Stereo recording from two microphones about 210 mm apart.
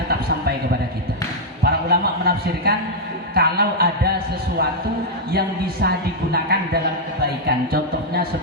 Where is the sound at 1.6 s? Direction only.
50° right (ahead or behind).